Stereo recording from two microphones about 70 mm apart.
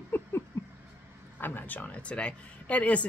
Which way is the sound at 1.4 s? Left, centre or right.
Left.